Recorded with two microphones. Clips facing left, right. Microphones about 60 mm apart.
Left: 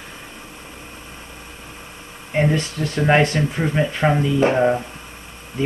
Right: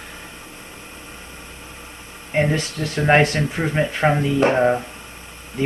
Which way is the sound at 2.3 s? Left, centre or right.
Centre.